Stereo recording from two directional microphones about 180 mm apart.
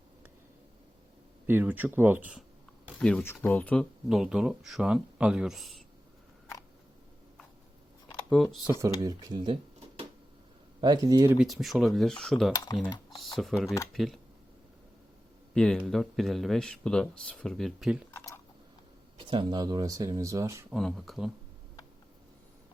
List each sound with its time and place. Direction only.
1.5 s speech: 10° right (ahead or behind)
3.0 s speech: 5° left (ahead or behind)
8.4 s speech: 5° left (ahead or behind)
8.8 s speech: 20° right (ahead or behind)
10.8 s speech: 25° right (ahead or behind)
11.3 s speech: centre (ahead or behind)
15.5 s speech: 5° left (ahead or behind)
18.1 s typing: 15° left (ahead or behind)
19.2 s speech: 25° right (ahead or behind)
20.7 s speech: centre (ahead or behind)